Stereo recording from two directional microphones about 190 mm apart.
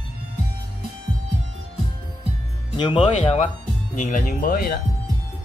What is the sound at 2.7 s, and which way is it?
Speech, 25° left (ahead or behind).